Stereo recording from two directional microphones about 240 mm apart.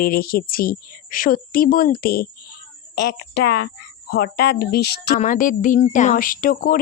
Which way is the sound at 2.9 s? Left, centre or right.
Left.